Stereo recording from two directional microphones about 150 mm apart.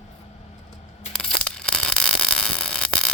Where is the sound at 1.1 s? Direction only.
5° left (ahead or behind).